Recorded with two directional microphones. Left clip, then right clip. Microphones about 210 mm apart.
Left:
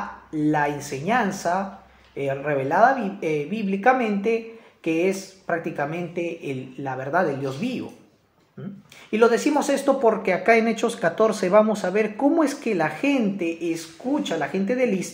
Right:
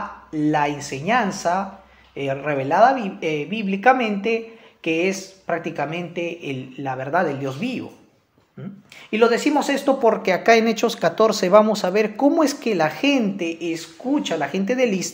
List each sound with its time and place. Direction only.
0.3 s a woman's voice: 25° right (ahead or behind)